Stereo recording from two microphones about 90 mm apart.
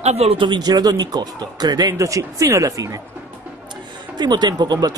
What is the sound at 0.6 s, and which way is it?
Speech, 50° right (ahead or behind).